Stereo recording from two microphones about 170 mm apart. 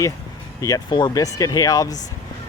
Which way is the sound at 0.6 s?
25° left (ahead or behind).